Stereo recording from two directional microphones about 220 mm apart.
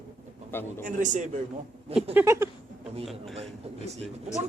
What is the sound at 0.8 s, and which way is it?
Speech, 35° right (ahead or behind).